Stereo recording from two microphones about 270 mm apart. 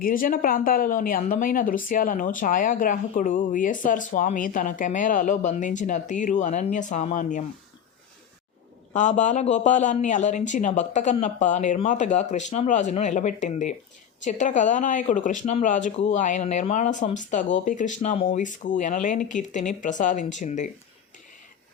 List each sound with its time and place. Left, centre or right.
0.0 s speech: left
8.9 s speech: left